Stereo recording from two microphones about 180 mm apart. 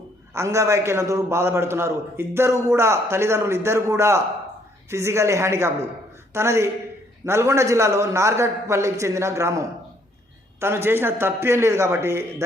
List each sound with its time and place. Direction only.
0.3 s a man's voice: 15° right (ahead or behind)